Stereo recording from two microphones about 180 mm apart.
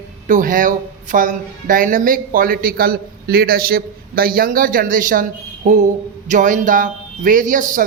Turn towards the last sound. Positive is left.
turn(degrees=-45)  # may be behind; listen again after turning